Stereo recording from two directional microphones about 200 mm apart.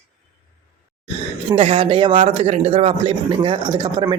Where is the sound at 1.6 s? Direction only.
30° right (ahead or behind).